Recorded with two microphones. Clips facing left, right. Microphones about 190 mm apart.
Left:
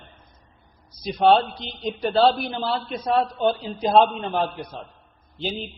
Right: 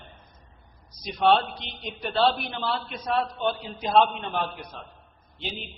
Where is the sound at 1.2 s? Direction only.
35° left (ahead or behind).